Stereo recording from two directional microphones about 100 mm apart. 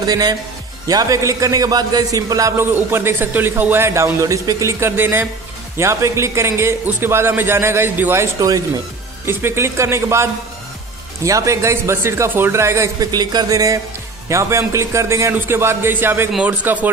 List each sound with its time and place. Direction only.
0.0 s a man's voice: 40° right (ahead or behind)
2.6 s a man's voice: 25° right (ahead or behind)
13.1 s a man's voice: 45° right (ahead or behind); by 16.9 s 20° right (ahead or behind)